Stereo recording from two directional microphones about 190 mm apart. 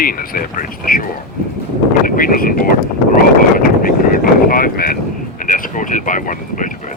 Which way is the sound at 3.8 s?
50° left (ahead or behind).